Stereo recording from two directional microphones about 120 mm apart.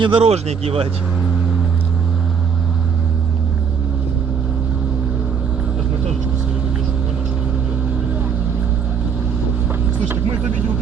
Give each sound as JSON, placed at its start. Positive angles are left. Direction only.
{"t": 0.0, "sound": "speech", "side_deg": -50}